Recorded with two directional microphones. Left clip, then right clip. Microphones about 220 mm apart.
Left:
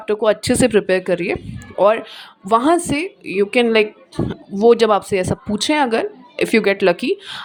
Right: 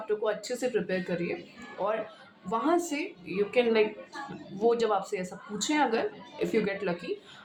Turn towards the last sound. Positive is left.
turn(degrees=45)  # may be behind; listen again after turning